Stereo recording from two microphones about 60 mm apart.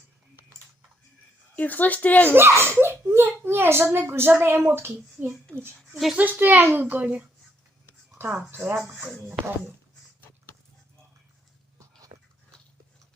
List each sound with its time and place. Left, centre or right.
1.5 s speech: left
2.3 s a child's voice: right
5.9 s speech: centre
6.1 s a woman's voice: right
8.4 s a woman's voice: right
9.0 s speech: centre